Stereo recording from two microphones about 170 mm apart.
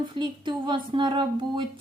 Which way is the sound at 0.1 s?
25° right (ahead or behind).